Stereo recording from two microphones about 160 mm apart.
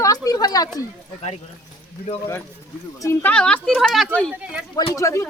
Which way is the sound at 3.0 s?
15° left (ahead or behind).